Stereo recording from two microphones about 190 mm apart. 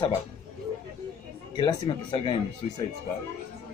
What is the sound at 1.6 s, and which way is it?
Speech, 25° left (ahead or behind).